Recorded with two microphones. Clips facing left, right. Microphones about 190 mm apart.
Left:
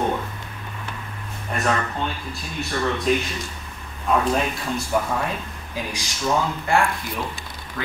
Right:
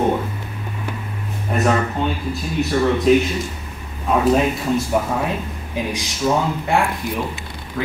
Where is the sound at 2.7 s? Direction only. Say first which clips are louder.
Right 7 dB; 5° right (ahead or behind).